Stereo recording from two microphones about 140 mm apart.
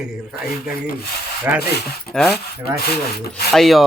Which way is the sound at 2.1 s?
Centre (ahead or behind).